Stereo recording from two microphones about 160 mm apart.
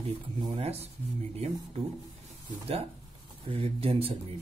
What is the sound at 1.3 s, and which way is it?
Speech, 40° right (ahead or behind).